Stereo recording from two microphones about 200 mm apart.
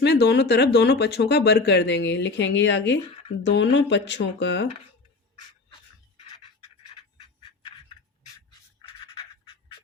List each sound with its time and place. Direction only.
0.0 s speech: 55° left (ahead or behind)